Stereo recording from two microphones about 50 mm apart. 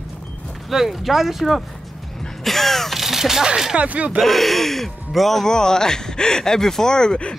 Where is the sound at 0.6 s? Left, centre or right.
Centre.